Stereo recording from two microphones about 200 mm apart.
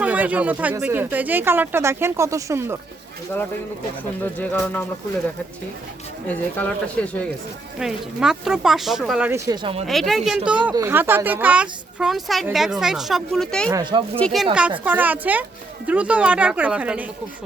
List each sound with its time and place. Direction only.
0.0 s speech: 5° right (ahead or behind)
4.4 s speech: 10° left (ahead or behind)
6.2 s speech: 5° left (ahead or behind)
9.5 s speech: 25° right (ahead or behind)
9.8 s speech: centre (ahead or behind)
13.7 s speech: 25° right (ahead or behind)
14.2 s speech: 5° left (ahead or behind)
14.8 s speech: 10° right (ahead or behind)